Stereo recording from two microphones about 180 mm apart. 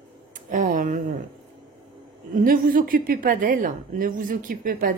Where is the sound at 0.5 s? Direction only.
45° right (ahead or behind).